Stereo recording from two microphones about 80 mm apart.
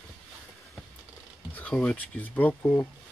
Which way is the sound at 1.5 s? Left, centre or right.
Centre.